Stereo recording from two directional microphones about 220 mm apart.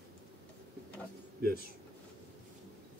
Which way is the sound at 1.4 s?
45° right (ahead or behind).